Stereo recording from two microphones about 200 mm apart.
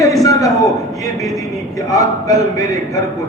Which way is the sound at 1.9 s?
15° left (ahead or behind).